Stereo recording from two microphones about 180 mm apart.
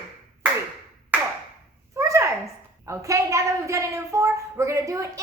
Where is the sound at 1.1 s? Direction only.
10° right (ahead or behind).